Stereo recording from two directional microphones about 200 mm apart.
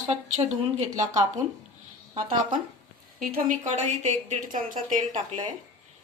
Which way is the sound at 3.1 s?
45° right (ahead or behind).